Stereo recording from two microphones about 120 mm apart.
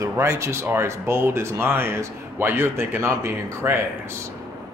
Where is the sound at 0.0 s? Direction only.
25° right (ahead or behind).